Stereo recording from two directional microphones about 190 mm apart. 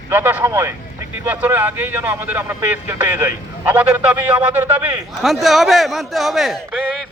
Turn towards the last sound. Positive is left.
turn(degrees=-5)  # may be behind; listen again after turning